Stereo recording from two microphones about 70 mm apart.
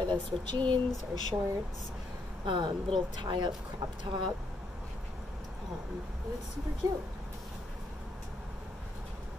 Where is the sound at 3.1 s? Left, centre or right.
Right.